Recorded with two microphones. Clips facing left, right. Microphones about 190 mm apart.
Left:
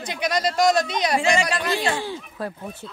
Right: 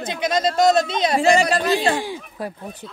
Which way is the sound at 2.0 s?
15° right (ahead or behind).